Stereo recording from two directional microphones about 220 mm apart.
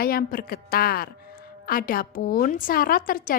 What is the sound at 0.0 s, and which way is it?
A woman's voice, 40° left (ahead or behind).